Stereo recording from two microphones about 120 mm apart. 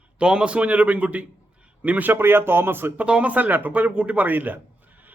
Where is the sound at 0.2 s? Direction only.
10° right (ahead or behind).